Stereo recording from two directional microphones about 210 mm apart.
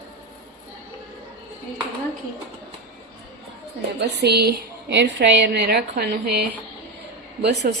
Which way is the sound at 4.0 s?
55° right (ahead or behind).